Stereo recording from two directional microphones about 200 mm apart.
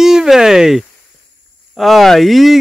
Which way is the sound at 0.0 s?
Centre (ahead or behind).